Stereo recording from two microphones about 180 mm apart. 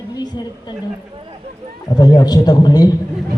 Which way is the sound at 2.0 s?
20° left (ahead or behind).